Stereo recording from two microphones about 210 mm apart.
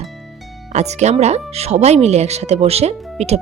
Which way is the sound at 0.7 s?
30° right (ahead or behind).